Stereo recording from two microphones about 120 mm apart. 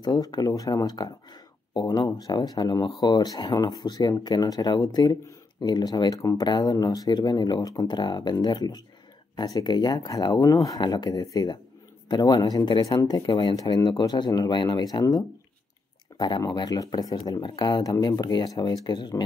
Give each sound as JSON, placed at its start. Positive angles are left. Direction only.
{"t": 0.0, "sound": "speech", "side_deg": 35}
{"t": 10.8, "sound": "speech", "side_deg": 40}